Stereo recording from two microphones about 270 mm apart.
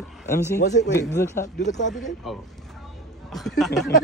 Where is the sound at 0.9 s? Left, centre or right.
Centre.